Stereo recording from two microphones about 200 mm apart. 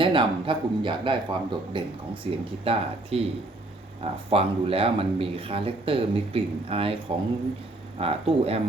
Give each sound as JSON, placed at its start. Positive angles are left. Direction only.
{"t": 0.0, "sound": "speech", "side_deg": -25}
{"t": 7.9, "sound": "speech", "side_deg": -30}